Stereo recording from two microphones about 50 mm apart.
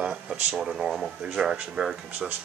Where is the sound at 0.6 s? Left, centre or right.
Centre.